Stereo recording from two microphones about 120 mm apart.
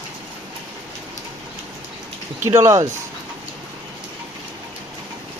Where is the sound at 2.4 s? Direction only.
25° right (ahead or behind).